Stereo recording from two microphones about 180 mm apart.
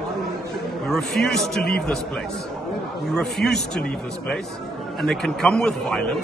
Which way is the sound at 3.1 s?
Centre (ahead or behind).